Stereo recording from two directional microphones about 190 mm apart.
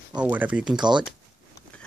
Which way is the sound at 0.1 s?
5° right (ahead or behind).